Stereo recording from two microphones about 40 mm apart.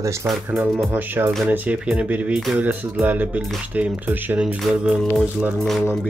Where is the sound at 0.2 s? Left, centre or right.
Right.